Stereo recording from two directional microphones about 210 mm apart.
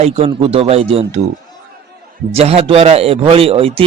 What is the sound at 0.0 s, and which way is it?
Speech, 30° right (ahead or behind).